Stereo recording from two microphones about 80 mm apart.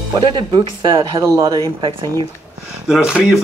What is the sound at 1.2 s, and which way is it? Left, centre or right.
Speech, right.